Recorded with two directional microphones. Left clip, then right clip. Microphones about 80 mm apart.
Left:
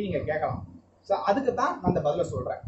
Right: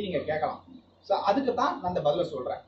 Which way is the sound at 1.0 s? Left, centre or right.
Left.